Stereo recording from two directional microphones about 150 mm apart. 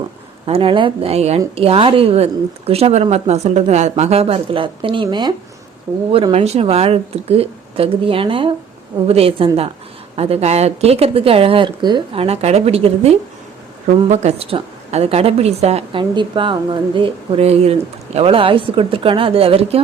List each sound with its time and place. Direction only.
0.4 s a woman's voice: 40° right (ahead or behind)